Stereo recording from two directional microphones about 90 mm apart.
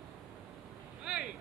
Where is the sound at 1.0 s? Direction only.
10° right (ahead or behind).